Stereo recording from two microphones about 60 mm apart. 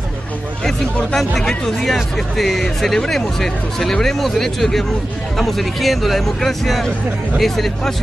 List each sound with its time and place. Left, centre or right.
1.1 s speech: centre